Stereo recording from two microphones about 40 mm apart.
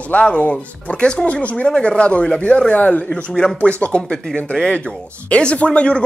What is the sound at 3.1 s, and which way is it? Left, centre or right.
Speech, centre.